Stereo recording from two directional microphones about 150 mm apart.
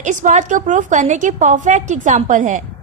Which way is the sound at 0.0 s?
55° right (ahead or behind).